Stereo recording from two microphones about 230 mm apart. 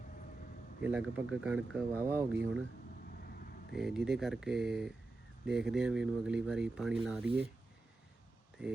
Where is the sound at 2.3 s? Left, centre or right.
Right.